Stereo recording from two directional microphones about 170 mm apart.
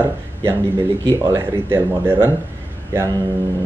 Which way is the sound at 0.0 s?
15° right (ahead or behind).